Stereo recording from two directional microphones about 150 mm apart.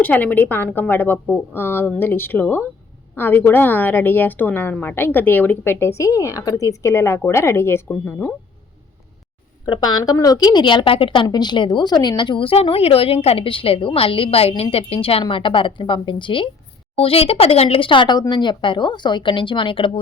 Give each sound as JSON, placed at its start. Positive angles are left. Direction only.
{"t": 0.0, "sound": "a woman's voice", "side_deg": 10}
{"t": 9.6, "sound": "a woman's voice", "side_deg": 30}